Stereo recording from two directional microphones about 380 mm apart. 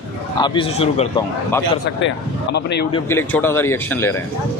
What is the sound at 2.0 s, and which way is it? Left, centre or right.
Speech, left.